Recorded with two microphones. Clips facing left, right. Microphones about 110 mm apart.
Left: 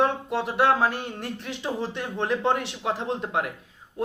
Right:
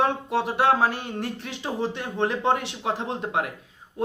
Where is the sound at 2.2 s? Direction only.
20° right (ahead or behind).